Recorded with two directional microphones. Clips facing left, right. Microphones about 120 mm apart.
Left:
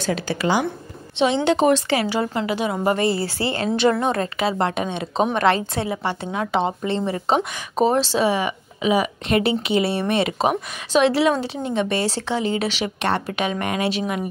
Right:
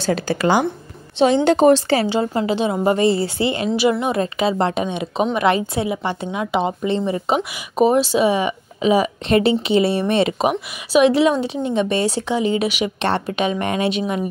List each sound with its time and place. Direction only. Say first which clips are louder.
0.0 s a woman's voice: right 4 dB; 40° right (ahead or behind); by 4.2 s 10° right (ahead or behind)
4.2 s a woman's voice: right 3 dB; 20° right (ahead or behind)
13.0 s a woman's voice: right 2 dB; 25° right (ahead or behind)